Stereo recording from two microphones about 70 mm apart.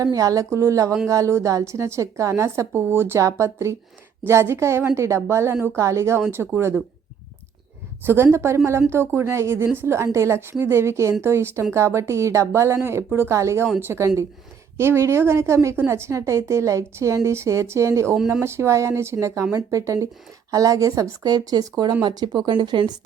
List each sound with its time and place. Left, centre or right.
0.0 s a woman's voice: right
6.2 s a woman's voice: right
8.0 s a woman's voice: right
22.0 s speech: right